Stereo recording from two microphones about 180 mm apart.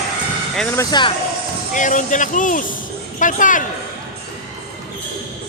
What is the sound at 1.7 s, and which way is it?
Speech, 45° left (ahead or behind).